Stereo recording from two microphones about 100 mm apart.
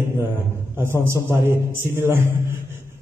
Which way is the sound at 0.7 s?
25° right (ahead or behind).